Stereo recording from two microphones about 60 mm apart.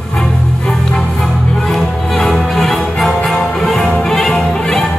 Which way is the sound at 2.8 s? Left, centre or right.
Centre.